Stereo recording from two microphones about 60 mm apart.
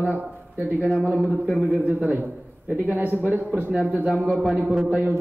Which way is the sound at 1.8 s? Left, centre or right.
Right.